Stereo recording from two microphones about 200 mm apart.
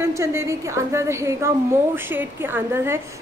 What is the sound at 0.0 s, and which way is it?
A woman's voice, 15° right (ahead or behind).